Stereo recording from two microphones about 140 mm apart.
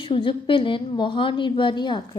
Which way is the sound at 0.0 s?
35° left (ahead or behind).